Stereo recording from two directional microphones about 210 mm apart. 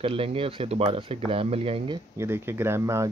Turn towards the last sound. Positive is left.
turn(degrees=-10)  # may be behind; listen again after turning